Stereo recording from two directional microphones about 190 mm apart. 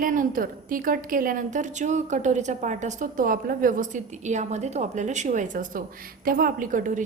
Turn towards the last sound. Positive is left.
turn(degrees=-45)  # may be behind; listen again after turning